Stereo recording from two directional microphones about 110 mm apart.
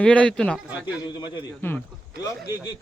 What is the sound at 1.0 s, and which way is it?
Speech, 40° left (ahead or behind).